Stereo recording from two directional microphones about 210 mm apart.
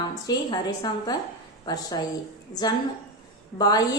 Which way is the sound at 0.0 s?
20° left (ahead or behind).